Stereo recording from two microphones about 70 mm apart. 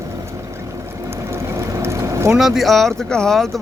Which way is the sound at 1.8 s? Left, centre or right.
Right.